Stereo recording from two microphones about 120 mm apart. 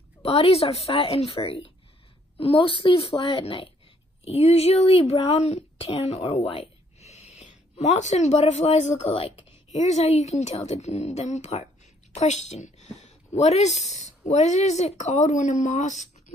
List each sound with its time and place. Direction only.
0.2 s a woman's voice: 55° left (ahead or behind)
4.2 s a woman's voice: 55° left (ahead or behind)
7.0 s a sound: 70° left (ahead or behind)
9.8 s a woman's voice: 70° left (ahead or behind)